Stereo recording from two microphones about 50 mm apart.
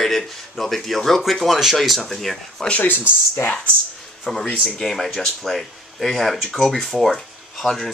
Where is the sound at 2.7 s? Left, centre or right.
Left.